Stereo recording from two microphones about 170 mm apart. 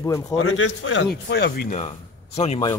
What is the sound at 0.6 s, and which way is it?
Speech, 90° left.